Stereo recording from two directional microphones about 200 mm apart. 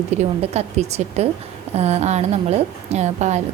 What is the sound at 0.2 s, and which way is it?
A woman's voice, 35° right (ahead or behind).